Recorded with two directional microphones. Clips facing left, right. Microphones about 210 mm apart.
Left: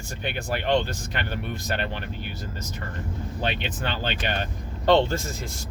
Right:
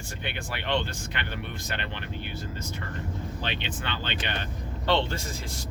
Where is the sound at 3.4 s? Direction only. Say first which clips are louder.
Left 7 dB; 45° left (ahead or behind).